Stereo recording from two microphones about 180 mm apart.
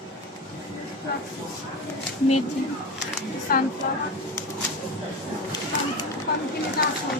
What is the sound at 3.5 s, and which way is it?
Speech, 55° left (ahead or behind).